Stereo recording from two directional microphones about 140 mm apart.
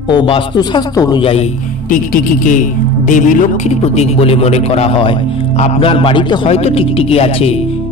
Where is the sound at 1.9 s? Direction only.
70° left (ahead or behind); by 7.6 s 45° left (ahead or behind).